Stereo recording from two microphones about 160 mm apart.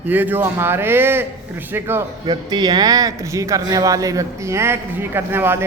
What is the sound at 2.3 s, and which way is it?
Speech, 25° right (ahead or behind).